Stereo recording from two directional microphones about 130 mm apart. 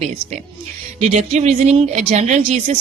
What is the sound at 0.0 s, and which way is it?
A woman's voice, 55° right (ahead or behind).